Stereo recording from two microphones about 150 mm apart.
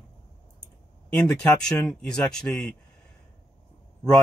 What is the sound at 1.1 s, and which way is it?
Speech, 5° left (ahead or behind).